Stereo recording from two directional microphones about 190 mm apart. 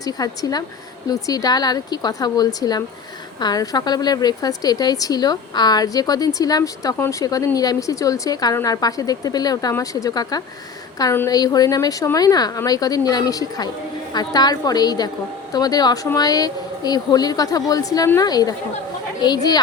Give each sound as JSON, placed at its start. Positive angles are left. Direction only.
{"t": 0.0, "sound": "a woman's voice", "side_deg": 20}